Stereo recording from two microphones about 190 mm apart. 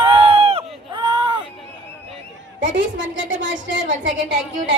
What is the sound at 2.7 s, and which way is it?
Speech, 75° right (ahead or behind).